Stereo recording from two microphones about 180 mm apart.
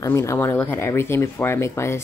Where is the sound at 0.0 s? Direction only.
15° left (ahead or behind).